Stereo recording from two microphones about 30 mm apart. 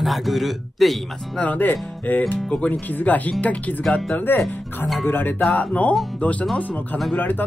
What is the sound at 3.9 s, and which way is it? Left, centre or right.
Speech, left.